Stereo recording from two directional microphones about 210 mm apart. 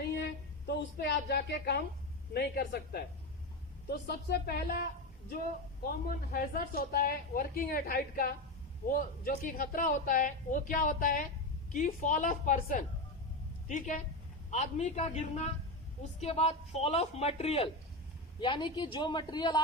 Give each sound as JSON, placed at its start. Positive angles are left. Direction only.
{"t": 0.7, "sound": "a woman's voice", "side_deg": 50}
{"t": 6.3, "sound": "a woman's voice", "side_deg": 45}